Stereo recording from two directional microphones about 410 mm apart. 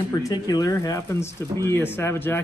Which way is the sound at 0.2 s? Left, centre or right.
Centre.